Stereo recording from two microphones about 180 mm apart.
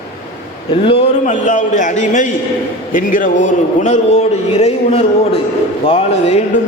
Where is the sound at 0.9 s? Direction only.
40° left (ahead or behind).